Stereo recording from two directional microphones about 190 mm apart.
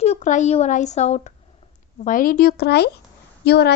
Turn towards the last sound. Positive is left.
turn(degrees=60)  # may be behind; listen again after turning